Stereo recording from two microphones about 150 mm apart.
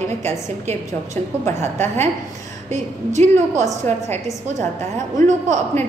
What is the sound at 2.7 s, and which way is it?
Speech, 50° right (ahead or behind).